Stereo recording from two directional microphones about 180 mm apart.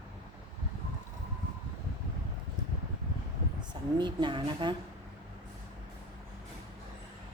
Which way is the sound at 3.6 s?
25° right (ahead or behind).